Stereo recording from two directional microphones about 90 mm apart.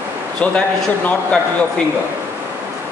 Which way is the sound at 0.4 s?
15° left (ahead or behind).